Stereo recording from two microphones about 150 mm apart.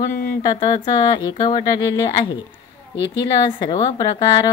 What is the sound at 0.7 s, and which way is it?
A woman's voice, 30° left (ahead or behind).